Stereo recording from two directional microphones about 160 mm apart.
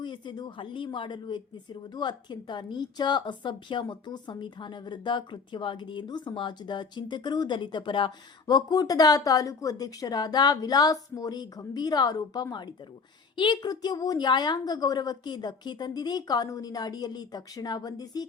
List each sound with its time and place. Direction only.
0.0 s speech: 30° left (ahead or behind)